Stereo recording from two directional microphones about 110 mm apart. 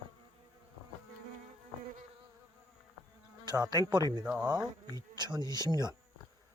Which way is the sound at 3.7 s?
40° right (ahead or behind).